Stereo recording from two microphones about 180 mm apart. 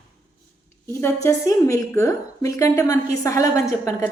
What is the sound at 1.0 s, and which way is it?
A woman's voice, 15° left (ahead or behind).